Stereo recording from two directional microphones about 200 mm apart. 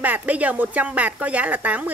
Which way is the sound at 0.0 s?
10° right (ahead or behind).